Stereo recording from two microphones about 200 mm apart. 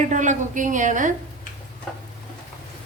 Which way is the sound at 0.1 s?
40° right (ahead or behind).